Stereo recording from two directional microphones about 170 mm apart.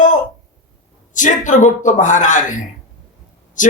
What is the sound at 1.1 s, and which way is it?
A man's voice, 45° left (ahead or behind).